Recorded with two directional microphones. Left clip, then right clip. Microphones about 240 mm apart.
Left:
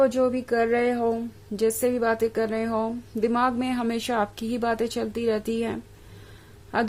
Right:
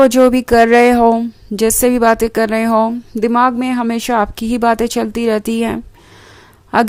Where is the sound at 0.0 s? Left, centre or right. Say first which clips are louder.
Right 12 dB; right.